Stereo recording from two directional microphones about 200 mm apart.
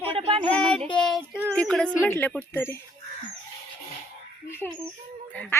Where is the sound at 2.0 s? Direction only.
10° left (ahead or behind).